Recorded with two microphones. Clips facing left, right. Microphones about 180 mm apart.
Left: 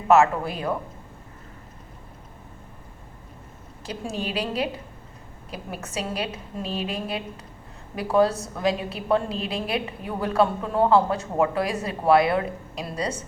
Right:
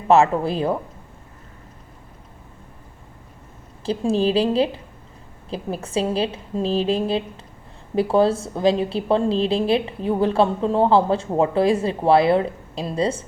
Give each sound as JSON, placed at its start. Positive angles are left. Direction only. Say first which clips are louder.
{"t": 0.1, "sound": "a woman's voice", "louder": "right 2 dB", "side_deg": -30}
{"t": 3.8, "sound": "a woman's voice", "louder": "right 11 dB", "side_deg": -30}